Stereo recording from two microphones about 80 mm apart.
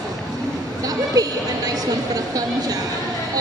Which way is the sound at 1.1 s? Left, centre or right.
Right.